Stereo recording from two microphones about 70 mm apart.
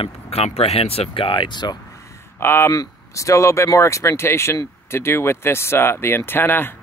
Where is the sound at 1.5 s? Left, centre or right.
Left.